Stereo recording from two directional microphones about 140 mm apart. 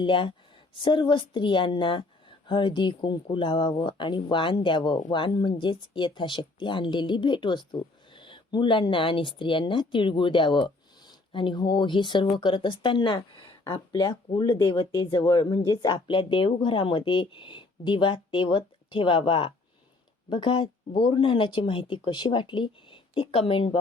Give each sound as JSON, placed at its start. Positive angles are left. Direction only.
{"t": 0.0, "sound": "speech", "side_deg": 35}